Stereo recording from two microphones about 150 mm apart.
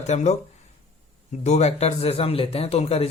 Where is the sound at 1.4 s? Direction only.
45° left (ahead or behind).